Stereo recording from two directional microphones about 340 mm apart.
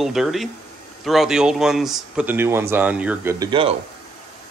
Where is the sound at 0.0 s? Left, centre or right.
Centre.